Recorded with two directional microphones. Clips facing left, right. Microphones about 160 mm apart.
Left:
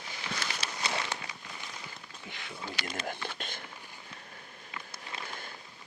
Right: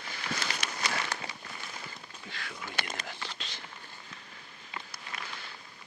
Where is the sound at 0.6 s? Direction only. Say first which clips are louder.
Even; 25° left (ahead or behind).